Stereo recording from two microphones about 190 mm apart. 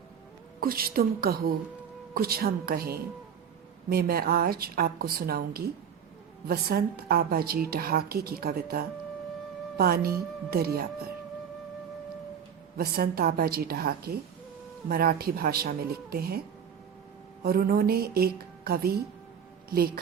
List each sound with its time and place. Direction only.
0.6 s a woman's voice: 50° right (ahead or behind)
12.7 s a woman's voice: 55° right (ahead or behind)
17.4 s a woman's voice: 55° right (ahead or behind)